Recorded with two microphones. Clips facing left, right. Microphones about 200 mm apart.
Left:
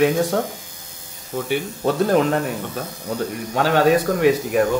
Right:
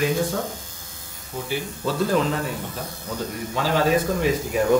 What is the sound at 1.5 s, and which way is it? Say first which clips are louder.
Speech: left 5 dB; 60° left (ahead or behind).